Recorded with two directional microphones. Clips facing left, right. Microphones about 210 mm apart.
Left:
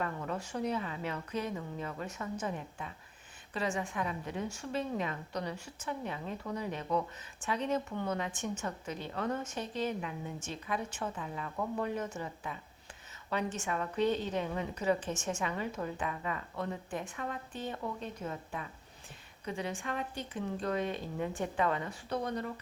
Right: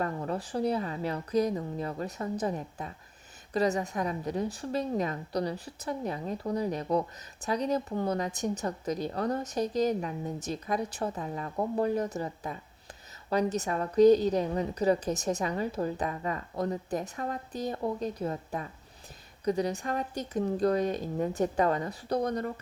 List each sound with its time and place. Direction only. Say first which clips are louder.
0.0 s a woman's voice: right 5 dB; 35° right (ahead or behind)